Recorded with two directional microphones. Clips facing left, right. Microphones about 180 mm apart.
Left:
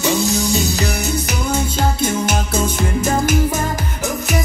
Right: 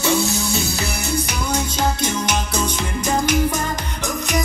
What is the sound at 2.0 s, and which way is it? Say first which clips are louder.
Music: left 3 dB; 50° left (ahead or behind).